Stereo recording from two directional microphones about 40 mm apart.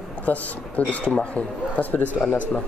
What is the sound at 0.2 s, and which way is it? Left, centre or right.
A man's voice, left.